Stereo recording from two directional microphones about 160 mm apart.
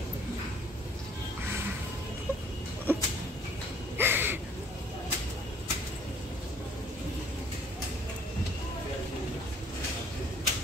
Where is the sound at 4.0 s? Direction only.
15° right (ahead or behind).